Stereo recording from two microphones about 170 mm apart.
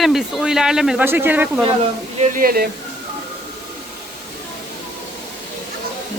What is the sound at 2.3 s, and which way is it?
Speech, 60° right (ahead or behind).